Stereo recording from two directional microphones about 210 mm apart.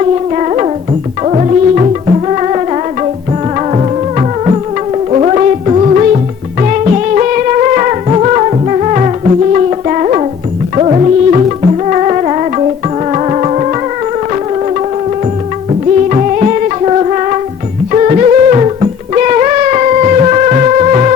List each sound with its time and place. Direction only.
0.0 s music: 30° right (ahead or behind)
16.0 s music: 30° right (ahead or behind)